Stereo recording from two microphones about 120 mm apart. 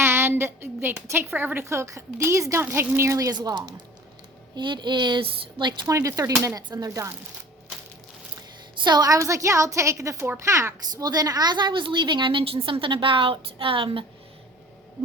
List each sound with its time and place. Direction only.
0.0 s a woman's voice: 20° right (ahead or behind); by 5.7 s 40° right (ahead or behind)
5.9 s a woman's voice: 25° right (ahead or behind)
8.8 s a woman's voice: 35° right (ahead or behind)